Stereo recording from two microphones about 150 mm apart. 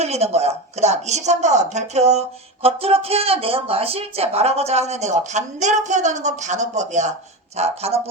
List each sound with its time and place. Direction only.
0.0 s speech: 45° right (ahead or behind)